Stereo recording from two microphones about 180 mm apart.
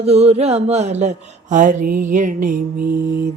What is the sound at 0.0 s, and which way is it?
Speech, 35° right (ahead or behind).